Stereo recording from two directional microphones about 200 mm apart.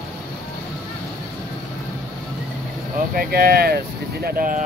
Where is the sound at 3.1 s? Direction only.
50° right (ahead or behind).